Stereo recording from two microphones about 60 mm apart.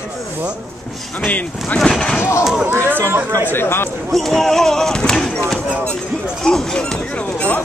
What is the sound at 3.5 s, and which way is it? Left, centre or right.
Speech, left.